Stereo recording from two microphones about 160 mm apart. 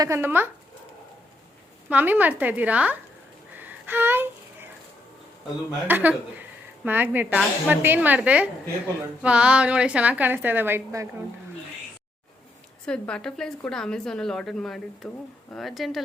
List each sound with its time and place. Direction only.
0.0 s a woman's voice: 15° right (ahead or behind)
1.9 s a woman's voice: 10° right (ahead or behind)
3.5 s a sound: 10° right (ahead or behind)
5.9 s a woman's voice: 10° right (ahead or behind)
12.8 s speech: 5° left (ahead or behind)